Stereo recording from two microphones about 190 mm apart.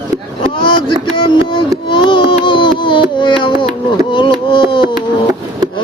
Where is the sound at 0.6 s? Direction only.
25° left (ahead or behind).